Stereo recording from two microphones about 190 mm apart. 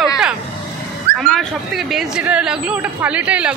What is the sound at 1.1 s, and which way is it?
Speech, centre (ahead or behind).